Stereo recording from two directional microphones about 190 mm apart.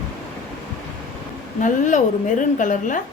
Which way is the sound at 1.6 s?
40° left (ahead or behind).